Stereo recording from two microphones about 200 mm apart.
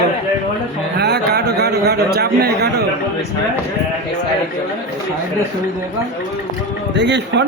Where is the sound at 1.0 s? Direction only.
55° right (ahead or behind).